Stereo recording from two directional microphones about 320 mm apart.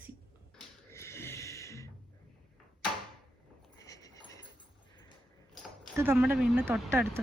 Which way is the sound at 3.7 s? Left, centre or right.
Centre.